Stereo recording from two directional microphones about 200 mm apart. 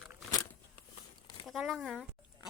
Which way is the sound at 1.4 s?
Centre (ahead or behind).